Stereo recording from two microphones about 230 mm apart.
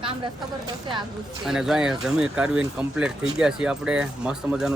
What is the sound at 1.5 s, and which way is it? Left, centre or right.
Speech, centre.